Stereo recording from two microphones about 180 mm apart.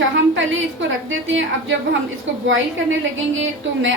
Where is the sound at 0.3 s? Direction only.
90° right.